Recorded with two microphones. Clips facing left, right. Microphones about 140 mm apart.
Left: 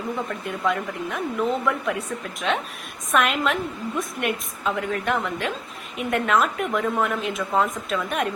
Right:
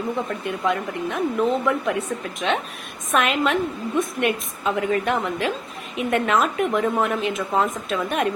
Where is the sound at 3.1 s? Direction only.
Centre (ahead or behind).